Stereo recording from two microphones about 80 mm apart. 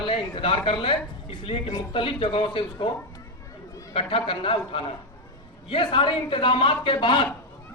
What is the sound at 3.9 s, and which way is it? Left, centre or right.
A man's voice, left.